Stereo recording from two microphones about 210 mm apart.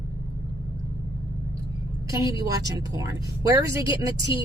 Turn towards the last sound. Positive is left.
turn(degrees=-15)  # may be behind; listen again after turning